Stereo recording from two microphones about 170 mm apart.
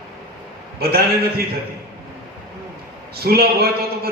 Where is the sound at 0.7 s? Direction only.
65° right (ahead or behind).